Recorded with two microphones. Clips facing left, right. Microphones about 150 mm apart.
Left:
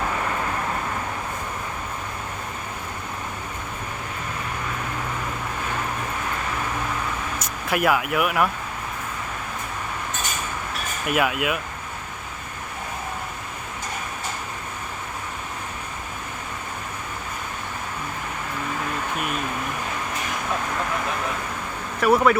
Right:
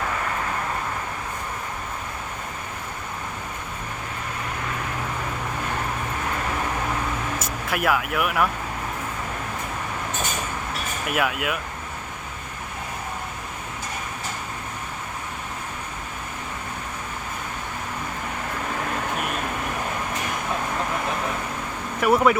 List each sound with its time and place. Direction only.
7.3 s speech: centre (ahead or behind)
11.1 s speech: centre (ahead or behind)
22.0 s speech: 20° right (ahead or behind)